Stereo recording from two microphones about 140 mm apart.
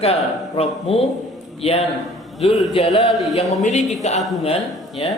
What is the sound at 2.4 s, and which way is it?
Speech, 45° left (ahead or behind).